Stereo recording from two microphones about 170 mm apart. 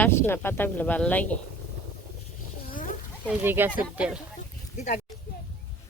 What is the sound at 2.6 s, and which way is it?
Wild animals, 55° left (ahead or behind).